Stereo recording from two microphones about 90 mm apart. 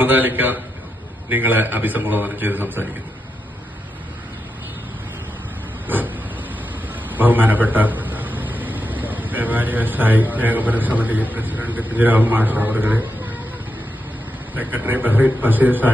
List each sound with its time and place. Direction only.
0.0 s a man's voice: 20° right (ahead or behind)
5.9 s a sound: 20° right (ahead or behind)
7.1 s a man's voice: 20° right (ahead or behind)
14.5 s a man's voice: 20° right (ahead or behind)